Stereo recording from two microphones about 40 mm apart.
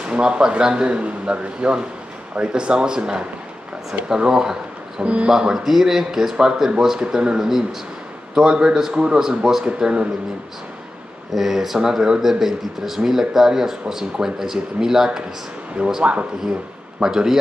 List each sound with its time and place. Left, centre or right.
0.0 s speech: right
5.0 s speech: right
5.3 s speech: centre
6.3 s speech: centre
9.7 s speech: right
11.3 s speech: centre
16.0 s speech: right
17.0 s speech: centre